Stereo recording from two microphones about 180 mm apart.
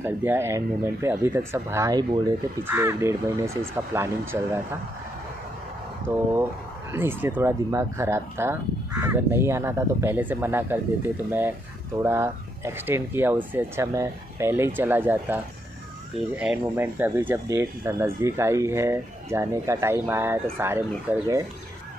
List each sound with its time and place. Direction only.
0.0 s speech: 10° right (ahead or behind)
6.1 s speech: 15° right (ahead or behind)